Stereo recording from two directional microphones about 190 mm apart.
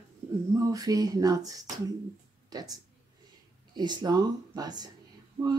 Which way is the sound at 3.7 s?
20° right (ahead or behind).